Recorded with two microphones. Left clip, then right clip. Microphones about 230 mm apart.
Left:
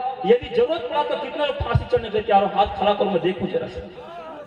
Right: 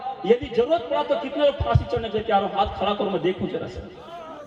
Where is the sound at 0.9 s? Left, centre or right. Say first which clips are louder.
Left 1 dB; left.